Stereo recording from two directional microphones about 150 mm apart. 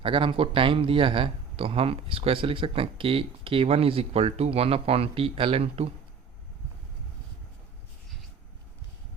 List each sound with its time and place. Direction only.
0.0 s speech: 35° right (ahead or behind)